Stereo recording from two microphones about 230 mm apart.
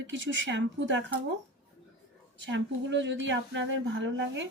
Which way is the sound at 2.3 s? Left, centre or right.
Right.